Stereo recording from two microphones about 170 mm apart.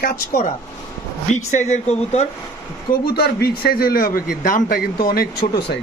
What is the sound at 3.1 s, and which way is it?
A man's voice, 65° left (ahead or behind).